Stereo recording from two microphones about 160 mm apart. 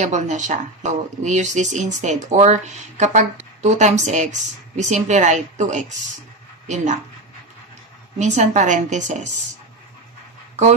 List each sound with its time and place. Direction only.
0.0 s speech: 50° right (ahead or behind)
8.2 s speech: 50° right (ahead or behind)